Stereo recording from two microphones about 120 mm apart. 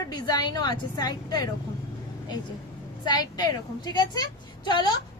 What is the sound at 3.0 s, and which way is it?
Speech, 35° left (ahead or behind).